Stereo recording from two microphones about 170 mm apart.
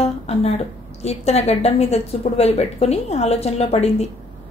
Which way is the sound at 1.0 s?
40° left (ahead or behind).